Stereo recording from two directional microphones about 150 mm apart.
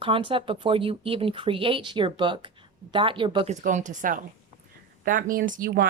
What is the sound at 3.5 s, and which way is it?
Speech, 55° right (ahead or behind).